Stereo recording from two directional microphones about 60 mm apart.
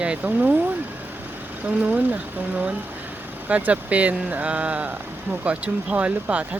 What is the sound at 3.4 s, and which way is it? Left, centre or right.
Speech, right.